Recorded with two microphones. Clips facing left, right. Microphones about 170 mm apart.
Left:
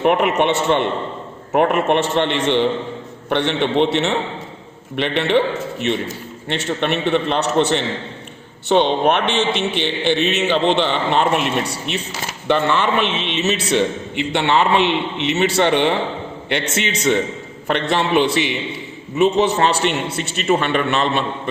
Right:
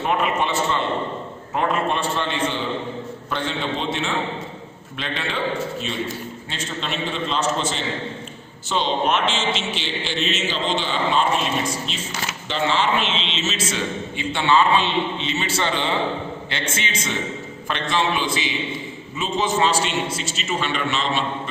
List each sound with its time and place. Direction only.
0.0 s a man's voice: 70° left (ahead or behind)